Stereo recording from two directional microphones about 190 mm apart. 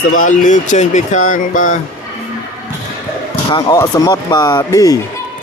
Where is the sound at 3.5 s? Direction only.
20° left (ahead or behind).